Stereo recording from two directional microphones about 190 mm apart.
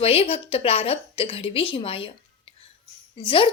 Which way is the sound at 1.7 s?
30° left (ahead or behind).